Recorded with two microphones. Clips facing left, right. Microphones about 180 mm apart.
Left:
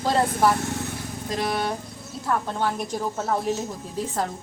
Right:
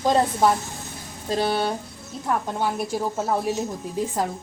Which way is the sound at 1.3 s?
30° right (ahead or behind).